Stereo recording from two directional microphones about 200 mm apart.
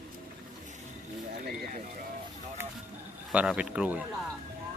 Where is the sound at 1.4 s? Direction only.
50° right (ahead or behind).